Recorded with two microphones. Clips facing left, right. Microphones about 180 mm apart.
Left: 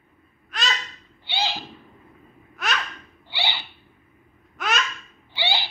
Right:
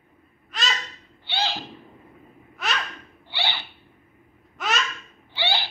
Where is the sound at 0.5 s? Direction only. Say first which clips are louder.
Left 1 dB; centre (ahead or behind).